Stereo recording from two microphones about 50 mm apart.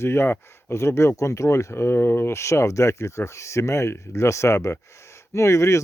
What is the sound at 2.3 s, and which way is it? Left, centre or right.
Speech, left.